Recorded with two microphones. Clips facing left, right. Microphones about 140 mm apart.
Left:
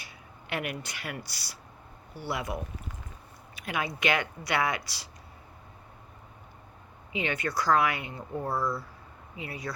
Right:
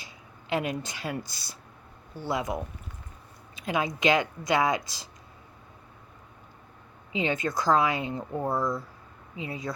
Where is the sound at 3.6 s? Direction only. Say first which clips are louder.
Right 4 dB; 20° right (ahead or behind).